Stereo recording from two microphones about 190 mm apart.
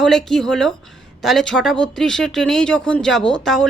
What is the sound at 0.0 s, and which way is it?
A woman's voice, centre (ahead or behind).